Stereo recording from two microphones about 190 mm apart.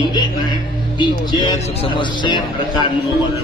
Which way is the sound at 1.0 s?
25° left (ahead or behind).